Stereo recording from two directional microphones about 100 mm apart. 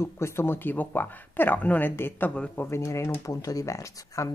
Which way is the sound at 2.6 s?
30° left (ahead or behind).